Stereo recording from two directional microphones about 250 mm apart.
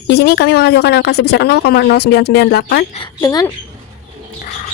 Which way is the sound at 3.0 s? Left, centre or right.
Centre.